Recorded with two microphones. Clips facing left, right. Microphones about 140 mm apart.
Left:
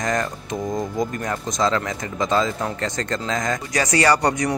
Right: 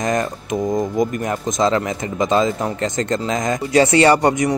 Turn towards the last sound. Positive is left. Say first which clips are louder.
# right 5 dB
turn(degrees=-25)  # may be behind; listen again after turning